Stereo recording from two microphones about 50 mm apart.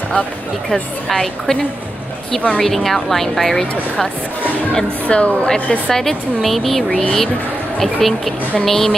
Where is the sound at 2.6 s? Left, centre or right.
Centre.